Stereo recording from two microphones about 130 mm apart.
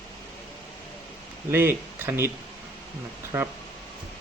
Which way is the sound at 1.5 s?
15° right (ahead or behind).